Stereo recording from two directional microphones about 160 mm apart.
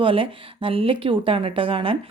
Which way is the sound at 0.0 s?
35° right (ahead or behind).